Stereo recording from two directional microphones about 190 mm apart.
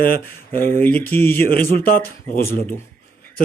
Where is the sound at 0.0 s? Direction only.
50° left (ahead or behind).